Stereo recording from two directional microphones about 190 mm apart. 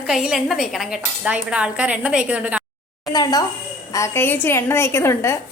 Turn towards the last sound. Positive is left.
turn(degrees=15)  # may be behind; listen again after turning